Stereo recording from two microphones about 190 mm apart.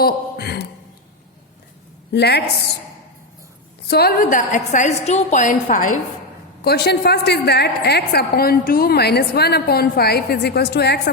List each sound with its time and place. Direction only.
0.0 s speech: 60° left (ahead or behind)
2.1 s a woman's voice: 60° left (ahead or behind)
3.8 s a woman's voice: 55° left (ahead or behind)
6.6 s a woman's voice: 55° left (ahead or behind)